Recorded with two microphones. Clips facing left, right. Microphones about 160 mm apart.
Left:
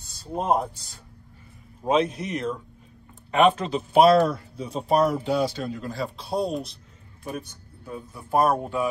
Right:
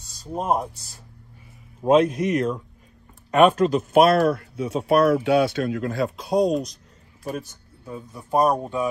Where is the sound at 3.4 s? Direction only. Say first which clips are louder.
Right 4 dB; 45° right (ahead or behind).